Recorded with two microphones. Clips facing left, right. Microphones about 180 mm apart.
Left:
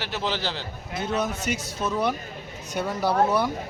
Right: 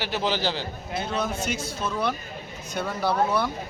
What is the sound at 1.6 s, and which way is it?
Speech, 40° left (ahead or behind).